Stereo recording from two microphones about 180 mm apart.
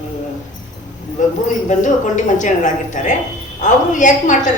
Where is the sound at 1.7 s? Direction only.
45° left (ahead or behind).